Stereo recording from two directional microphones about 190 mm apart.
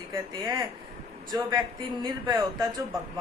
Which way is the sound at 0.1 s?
20° right (ahead or behind).